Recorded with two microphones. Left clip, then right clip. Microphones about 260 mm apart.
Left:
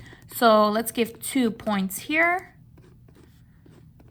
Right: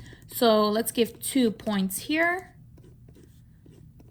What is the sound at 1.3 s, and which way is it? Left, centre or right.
Speech, left.